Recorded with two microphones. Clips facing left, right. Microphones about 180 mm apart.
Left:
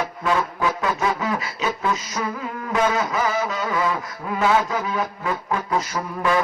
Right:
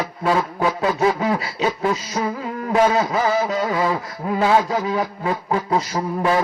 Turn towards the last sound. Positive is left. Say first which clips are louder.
# right 2 dB
turn(degrees=-30)  # may be behind; listen again after turning